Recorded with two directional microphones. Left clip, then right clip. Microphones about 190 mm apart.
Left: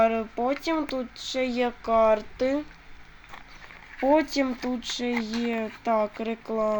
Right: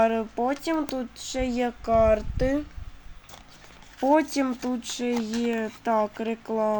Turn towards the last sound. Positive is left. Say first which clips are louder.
# right 1 dB
turn(degrees=-5)  # may be behind; listen again after turning